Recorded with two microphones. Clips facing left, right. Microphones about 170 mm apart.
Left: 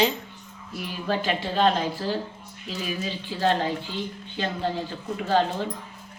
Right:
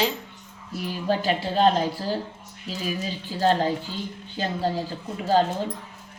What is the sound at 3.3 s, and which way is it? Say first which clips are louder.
A woman's voice: right 2 dB; 40° right (ahead or behind).